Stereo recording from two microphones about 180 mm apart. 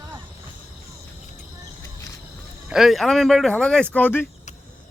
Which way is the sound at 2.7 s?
Centre (ahead or behind).